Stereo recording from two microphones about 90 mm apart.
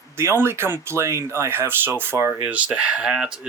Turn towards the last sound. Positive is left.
turn(degrees=-10)  # may be behind; listen again after turning